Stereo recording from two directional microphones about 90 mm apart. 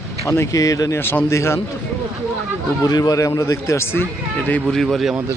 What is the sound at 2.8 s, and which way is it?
A man's voice, 45° left (ahead or behind).